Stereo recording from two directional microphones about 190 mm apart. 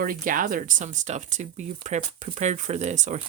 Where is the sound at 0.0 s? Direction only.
45° right (ahead or behind).